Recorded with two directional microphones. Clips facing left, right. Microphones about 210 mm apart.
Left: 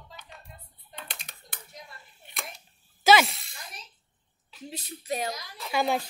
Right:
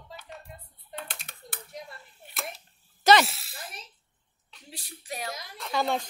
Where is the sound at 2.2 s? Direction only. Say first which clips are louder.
Right 3 dB; 5° right (ahead or behind).